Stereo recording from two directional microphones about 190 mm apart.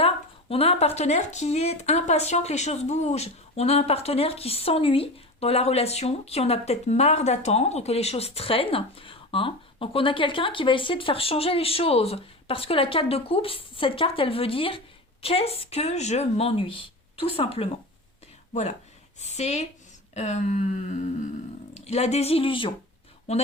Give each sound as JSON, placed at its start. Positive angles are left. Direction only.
{"t": 0.0, "sound": "speech", "side_deg": 30}
{"t": 19.2, "sound": "speech", "side_deg": 35}